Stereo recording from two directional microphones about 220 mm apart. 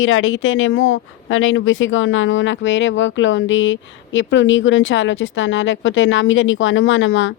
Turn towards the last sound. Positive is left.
turn(degrees=60)  # may be behind; listen again after turning